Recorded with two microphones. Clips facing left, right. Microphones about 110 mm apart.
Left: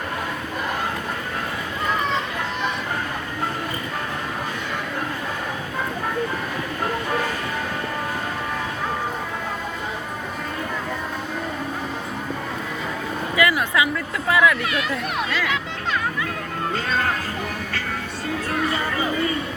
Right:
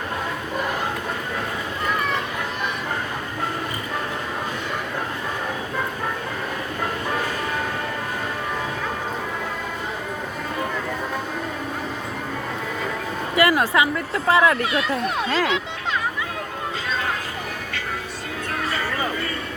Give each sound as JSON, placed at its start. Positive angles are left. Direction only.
{"t": 13.3, "sound": "a woman's voice", "side_deg": -35}
{"t": 18.7, "sound": "music", "side_deg": 25}